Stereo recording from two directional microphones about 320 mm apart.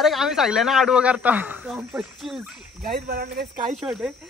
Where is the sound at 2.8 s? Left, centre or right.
Right.